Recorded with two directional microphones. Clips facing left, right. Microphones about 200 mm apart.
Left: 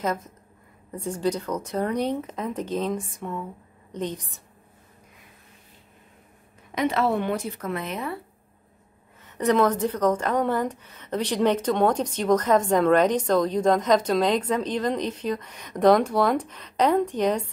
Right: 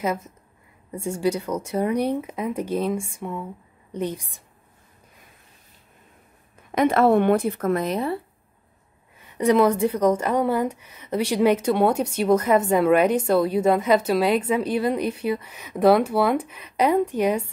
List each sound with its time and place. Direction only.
0.0 s a woman's voice: 10° right (ahead or behind)
6.7 s speech: 50° right (ahead or behind); by 8.2 s 35° right (ahead or behind)
9.2 s a woman's voice: 10° right (ahead or behind)